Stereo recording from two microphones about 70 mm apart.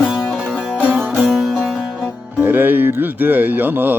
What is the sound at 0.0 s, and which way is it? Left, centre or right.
Music, centre.